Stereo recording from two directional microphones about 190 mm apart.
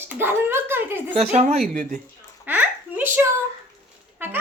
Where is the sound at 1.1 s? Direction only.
35° right (ahead or behind).